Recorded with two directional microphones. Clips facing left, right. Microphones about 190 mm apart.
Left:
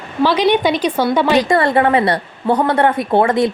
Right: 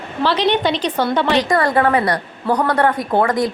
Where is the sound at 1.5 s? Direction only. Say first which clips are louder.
Left 2 dB; 25° left (ahead or behind).